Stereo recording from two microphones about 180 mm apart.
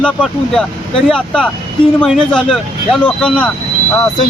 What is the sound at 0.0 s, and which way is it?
Speech, 5° left (ahead or behind).